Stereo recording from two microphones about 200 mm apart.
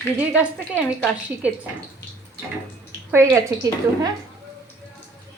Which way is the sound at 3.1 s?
15° right (ahead or behind).